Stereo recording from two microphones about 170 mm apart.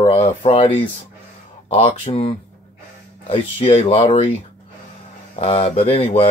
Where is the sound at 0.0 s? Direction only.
35° left (ahead or behind).